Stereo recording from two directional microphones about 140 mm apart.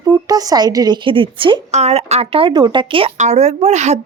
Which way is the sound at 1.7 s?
50° right (ahead or behind).